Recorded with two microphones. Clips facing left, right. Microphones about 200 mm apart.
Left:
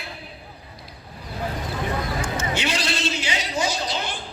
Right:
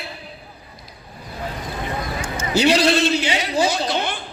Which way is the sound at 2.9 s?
60° right (ahead or behind).